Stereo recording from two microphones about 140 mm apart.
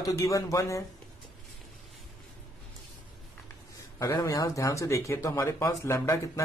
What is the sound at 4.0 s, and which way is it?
Speech, 25° left (ahead or behind).